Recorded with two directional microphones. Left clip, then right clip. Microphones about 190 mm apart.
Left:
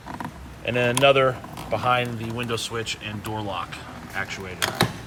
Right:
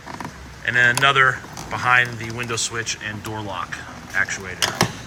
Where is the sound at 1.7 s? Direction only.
15° left (ahead or behind).